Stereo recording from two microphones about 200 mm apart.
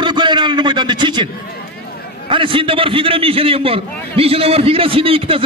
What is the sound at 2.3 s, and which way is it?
A man's voice, 25° right (ahead or behind).